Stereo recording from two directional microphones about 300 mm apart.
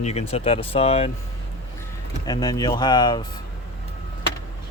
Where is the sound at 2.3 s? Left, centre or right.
Centre.